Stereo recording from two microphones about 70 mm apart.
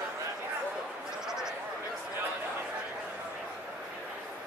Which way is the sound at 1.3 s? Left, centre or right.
Centre.